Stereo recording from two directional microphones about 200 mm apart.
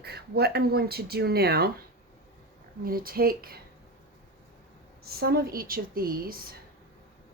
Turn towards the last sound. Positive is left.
turn(degrees=-45)  # may be behind; listen again after turning